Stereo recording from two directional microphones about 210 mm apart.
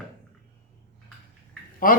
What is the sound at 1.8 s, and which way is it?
Speech, 40° left (ahead or behind).